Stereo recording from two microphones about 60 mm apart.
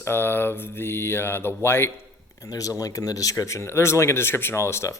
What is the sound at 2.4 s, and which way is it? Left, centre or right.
Speech, left.